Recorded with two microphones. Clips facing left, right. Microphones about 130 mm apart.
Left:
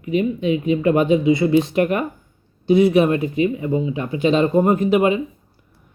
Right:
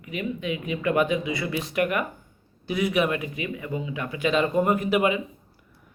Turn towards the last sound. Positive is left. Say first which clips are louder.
# left 6 dB
turn(degrees=25)  # may be behind; listen again after turning